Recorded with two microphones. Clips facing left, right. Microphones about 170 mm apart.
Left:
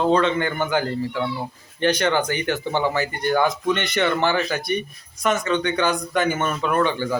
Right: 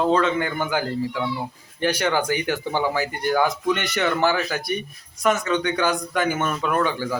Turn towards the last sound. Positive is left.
turn(degrees=-5)  # may be behind; listen again after turning